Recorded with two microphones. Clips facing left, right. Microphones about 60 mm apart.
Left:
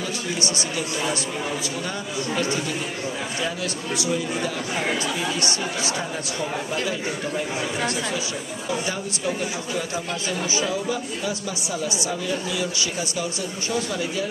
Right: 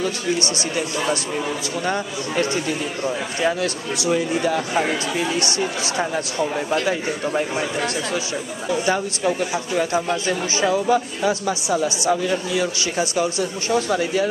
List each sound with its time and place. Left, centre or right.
1.9 s speech: right
4.1 s speech: right
6.7 s speech: right
9.8 s speech: right
13.7 s speech: right